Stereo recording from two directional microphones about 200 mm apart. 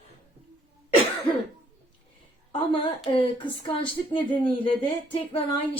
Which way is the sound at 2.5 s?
25° left (ahead or behind).